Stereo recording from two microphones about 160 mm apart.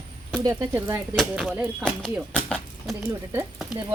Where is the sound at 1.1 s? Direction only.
Centre (ahead or behind).